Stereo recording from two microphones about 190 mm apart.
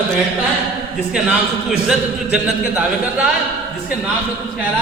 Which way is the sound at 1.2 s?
5° right (ahead or behind).